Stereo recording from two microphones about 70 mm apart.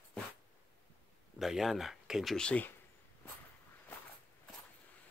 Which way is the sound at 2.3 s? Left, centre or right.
Centre.